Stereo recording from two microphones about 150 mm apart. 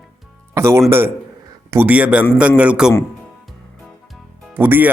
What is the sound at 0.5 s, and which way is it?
Speech, 15° right (ahead or behind).